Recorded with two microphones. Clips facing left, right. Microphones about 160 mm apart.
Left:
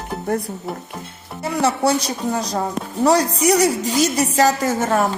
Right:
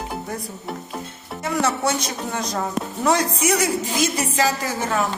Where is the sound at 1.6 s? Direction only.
35° left (ahead or behind).